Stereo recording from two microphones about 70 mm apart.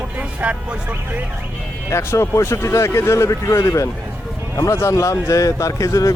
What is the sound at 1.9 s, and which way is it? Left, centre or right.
Speech, left.